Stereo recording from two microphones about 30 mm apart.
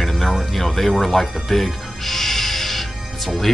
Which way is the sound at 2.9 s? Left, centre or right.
Centre.